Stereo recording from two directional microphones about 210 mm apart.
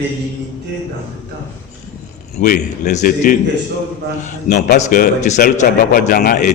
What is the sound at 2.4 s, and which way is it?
Speech, 35° left (ahead or behind).